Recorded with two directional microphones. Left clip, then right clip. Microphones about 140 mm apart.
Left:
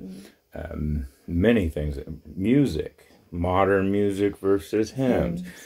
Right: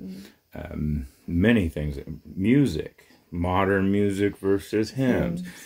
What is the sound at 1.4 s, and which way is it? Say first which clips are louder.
Speech: left 1 dB; 30° right (ahead or behind).